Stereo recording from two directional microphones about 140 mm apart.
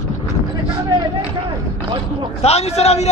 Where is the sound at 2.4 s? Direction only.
50° left (ahead or behind).